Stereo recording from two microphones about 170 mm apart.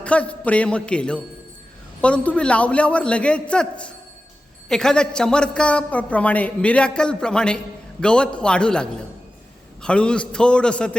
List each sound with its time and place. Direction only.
0.0 s a man's voice: 5° left (ahead or behind)